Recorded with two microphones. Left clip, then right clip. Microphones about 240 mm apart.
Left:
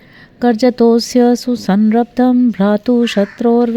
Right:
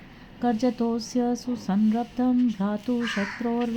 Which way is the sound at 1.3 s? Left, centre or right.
Left.